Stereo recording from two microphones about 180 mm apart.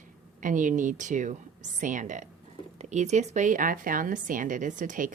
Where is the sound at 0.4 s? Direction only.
45° right (ahead or behind).